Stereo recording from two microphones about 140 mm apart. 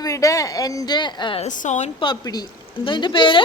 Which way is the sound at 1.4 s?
55° left (ahead or behind).